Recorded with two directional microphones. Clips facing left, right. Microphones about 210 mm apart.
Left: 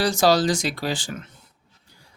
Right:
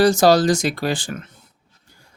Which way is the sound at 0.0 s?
45° right (ahead or behind).